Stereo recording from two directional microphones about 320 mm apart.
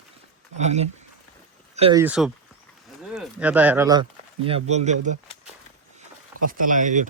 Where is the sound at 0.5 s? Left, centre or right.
Right.